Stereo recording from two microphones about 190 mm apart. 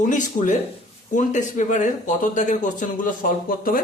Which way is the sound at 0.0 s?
40° left (ahead or behind).